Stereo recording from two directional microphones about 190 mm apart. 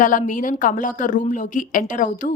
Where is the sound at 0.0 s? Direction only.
45° left (ahead or behind).